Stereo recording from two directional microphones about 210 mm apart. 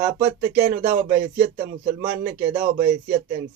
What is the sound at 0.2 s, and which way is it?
Speech, 15° right (ahead or behind).